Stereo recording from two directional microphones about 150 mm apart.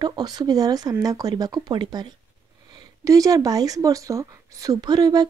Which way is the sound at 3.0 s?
25° right (ahead or behind).